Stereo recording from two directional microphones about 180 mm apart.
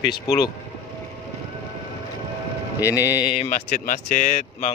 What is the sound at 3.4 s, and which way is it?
Speech, 40° left (ahead or behind).